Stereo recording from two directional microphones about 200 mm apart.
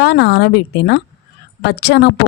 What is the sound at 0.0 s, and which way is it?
Speech, 55° left (ahead or behind).